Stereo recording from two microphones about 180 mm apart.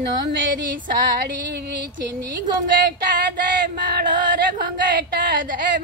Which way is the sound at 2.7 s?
50° right (ahead or behind).